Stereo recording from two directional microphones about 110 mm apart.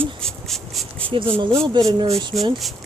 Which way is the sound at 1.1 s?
50° right (ahead or behind).